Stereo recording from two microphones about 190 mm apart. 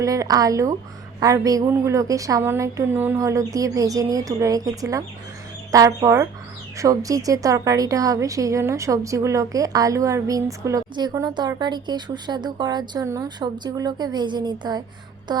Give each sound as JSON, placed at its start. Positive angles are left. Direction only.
{"t": 0.0, "sound": "a woman's voice", "side_deg": -15}